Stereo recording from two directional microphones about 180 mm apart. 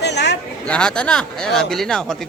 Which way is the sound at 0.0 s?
70° left (ahead or behind).